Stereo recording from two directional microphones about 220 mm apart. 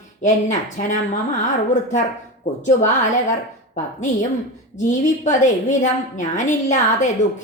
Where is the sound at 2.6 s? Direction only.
35° left (ahead or behind).